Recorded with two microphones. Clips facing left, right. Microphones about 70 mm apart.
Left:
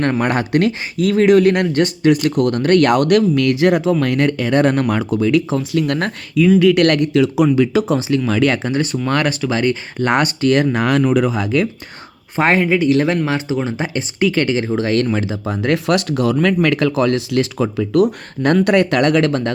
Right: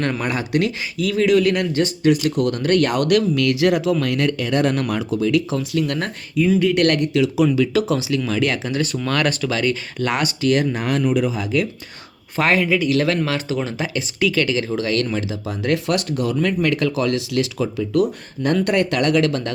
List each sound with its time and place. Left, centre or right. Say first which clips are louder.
0.0 s speech: left 5 dB; left
4.9 s speech: left 3 dB; left
6.6 s speech: left 5 dB; left
7.5 s speech: left 3 dB; left
8.3 s speech: left 6 dB; left
10.1 s speech: left 4 dB; left
12.4 s speech: left 3 dB; left